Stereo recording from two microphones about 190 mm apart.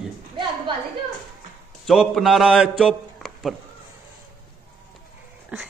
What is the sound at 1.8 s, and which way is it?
A man's voice, centre (ahead or behind).